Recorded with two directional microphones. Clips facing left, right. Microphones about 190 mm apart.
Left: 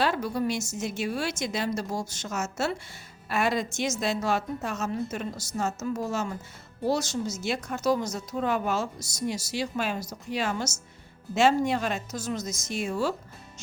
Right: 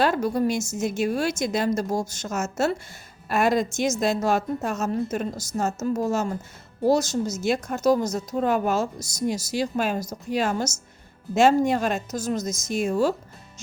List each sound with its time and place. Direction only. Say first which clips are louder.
0.0 s a woman's voice: right 5 dB; 45° right (ahead or behind)